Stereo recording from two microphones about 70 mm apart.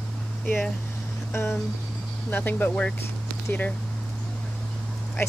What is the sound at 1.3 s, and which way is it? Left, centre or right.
Speech, left.